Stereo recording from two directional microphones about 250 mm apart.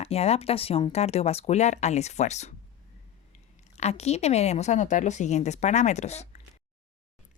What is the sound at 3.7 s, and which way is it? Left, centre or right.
Speech, left.